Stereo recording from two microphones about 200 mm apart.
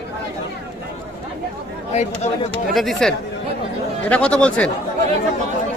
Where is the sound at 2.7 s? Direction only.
Centre (ahead or behind).